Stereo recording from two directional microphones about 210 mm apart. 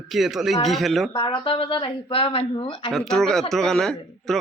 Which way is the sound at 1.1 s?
20° left (ahead or behind).